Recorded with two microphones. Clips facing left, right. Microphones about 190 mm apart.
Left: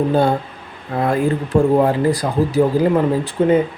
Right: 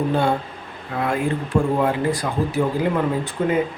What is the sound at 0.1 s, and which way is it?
Speech, 40° left (ahead or behind).